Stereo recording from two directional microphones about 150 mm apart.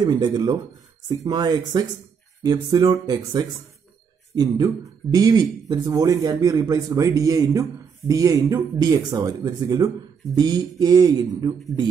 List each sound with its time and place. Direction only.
0.0 s speech: 30° right (ahead or behind)